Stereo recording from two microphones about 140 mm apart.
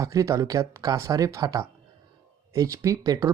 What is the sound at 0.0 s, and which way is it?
Speech, 25° right (ahead or behind).